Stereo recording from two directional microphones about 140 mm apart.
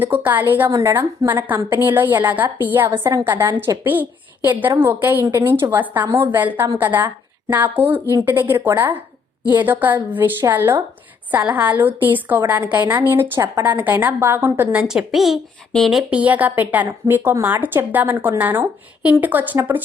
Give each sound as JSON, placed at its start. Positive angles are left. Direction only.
{"t": 0.0, "sound": "a woman's voice", "side_deg": -15}